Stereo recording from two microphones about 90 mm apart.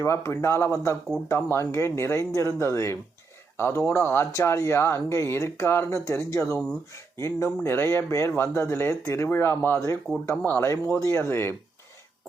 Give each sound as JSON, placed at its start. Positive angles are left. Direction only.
{"t": 0.0, "sound": "speech", "side_deg": 30}